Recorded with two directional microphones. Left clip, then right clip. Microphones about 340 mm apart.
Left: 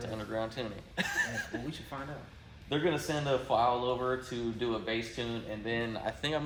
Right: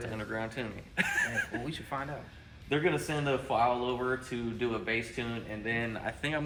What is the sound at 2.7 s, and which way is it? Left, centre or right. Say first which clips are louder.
Speech: right 1 dB; centre.